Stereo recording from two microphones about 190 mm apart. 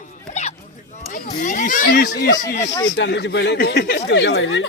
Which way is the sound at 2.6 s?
20° left (ahead or behind).